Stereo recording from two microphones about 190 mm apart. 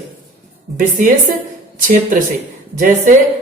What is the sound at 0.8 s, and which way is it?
A woman's voice, 45° right (ahead or behind).